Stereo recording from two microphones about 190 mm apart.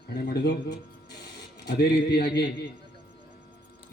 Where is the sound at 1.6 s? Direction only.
60° left (ahead or behind).